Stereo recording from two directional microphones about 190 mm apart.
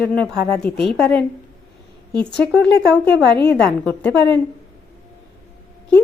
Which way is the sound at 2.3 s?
5° left (ahead or behind).